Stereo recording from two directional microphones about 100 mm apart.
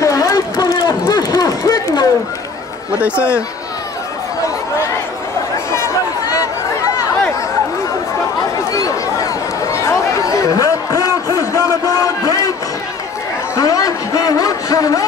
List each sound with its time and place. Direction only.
0.0 s run: 35° left (ahead or behind)
8.7 s chatter: 35° left (ahead or behind)
13.6 s a sound: 35° left (ahead or behind)